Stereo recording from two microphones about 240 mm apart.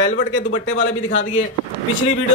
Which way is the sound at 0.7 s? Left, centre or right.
Left.